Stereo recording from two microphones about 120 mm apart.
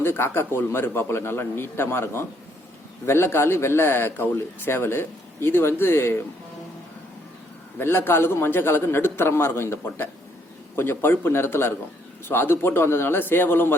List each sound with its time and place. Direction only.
0.0 s a man's voice: 20° left (ahead or behind)
7.8 s a man's voice: 20° left (ahead or behind)